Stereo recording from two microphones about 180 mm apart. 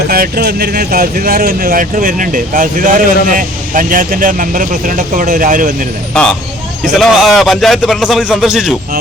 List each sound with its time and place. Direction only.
0.1 s speech: 55° right (ahead or behind)
7.0 s speech: centre (ahead or behind)